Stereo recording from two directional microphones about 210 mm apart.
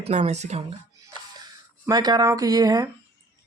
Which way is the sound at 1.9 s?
20° right (ahead or behind).